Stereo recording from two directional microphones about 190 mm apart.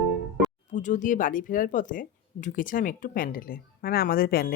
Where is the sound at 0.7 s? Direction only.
40° left (ahead or behind).